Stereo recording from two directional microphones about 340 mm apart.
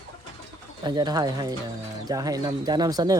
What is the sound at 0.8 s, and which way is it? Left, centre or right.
Speech, centre.